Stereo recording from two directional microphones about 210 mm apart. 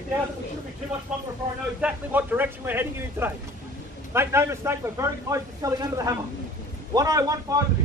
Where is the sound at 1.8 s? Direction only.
10° right (ahead or behind).